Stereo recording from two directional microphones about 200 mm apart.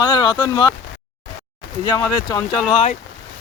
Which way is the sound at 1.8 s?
15° left (ahead or behind).